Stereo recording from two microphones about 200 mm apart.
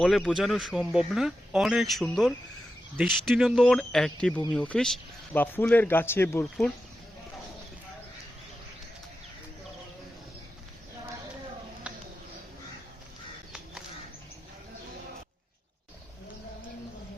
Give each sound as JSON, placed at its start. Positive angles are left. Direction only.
{"t": 0.0, "sound": "speech", "side_deg": 0}